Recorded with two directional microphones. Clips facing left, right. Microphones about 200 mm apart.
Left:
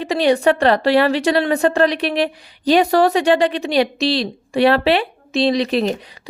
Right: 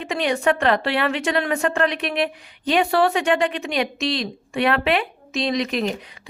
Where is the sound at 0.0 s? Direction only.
35° left (ahead or behind).